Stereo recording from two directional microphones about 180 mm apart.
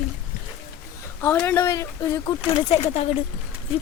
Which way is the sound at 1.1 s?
15° left (ahead or behind).